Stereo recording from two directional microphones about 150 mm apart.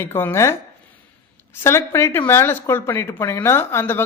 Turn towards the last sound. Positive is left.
turn(degrees=15)  # may be behind; listen again after turning